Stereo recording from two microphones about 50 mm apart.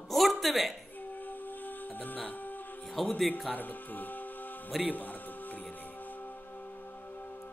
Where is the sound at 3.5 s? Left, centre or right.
Left.